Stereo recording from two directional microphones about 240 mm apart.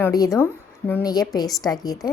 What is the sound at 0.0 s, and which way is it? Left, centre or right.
Speech, centre.